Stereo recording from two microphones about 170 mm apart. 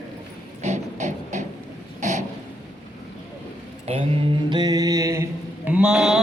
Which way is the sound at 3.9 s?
35° right (ahead or behind).